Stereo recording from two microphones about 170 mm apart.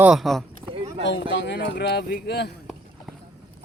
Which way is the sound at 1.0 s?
90° left.